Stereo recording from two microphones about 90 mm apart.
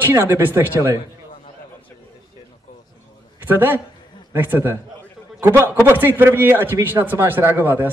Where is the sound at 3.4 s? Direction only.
25° right (ahead or behind).